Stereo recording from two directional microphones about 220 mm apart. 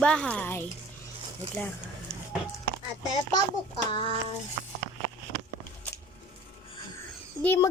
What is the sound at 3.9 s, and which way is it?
Speech, 20° left (ahead or behind).